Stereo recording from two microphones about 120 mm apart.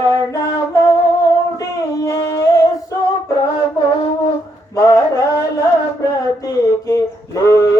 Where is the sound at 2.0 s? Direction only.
25° left (ahead or behind).